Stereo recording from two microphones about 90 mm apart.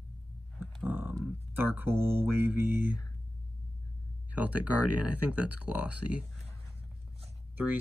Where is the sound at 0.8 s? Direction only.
20° right (ahead or behind).